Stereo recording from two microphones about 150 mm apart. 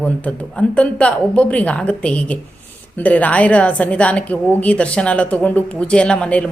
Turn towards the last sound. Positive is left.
turn(degrees=10)  # may be behind; listen again after turning